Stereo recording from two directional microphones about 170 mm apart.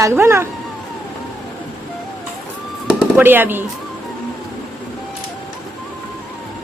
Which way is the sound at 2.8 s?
10° right (ahead or behind).